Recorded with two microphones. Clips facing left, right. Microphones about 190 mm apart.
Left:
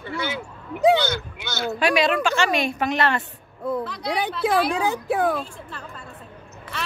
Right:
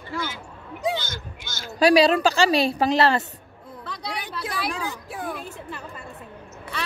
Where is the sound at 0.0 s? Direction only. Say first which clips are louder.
Left 3 dB; 70° left (ahead or behind).